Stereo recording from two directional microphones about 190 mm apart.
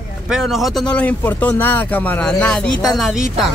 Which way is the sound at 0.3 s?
Centre (ahead or behind).